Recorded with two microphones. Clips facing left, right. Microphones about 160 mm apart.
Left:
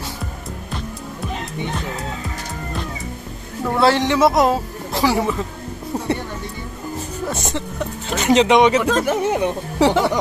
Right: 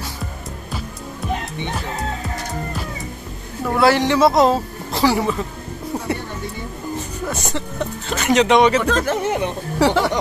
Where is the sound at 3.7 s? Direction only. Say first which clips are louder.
Right 1 dB; 20° left (ahead or behind).